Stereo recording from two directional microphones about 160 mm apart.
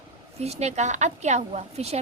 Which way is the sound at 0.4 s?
45° right (ahead or behind).